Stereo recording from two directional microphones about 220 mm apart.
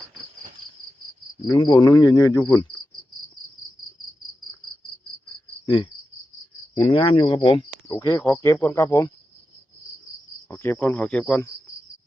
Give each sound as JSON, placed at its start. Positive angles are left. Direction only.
{"t": 1.5, "sound": "cricket", "side_deg": 20}
{"t": 5.6, "sound": "cricket", "side_deg": 20}
{"t": 6.8, "sound": "speech", "side_deg": 25}
{"t": 8.2, "sound": "cricket", "side_deg": 10}
{"t": 10.5, "sound": "cricket", "side_deg": 10}